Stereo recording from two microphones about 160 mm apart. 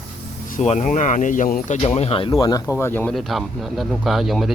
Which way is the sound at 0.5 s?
45° left (ahead or behind).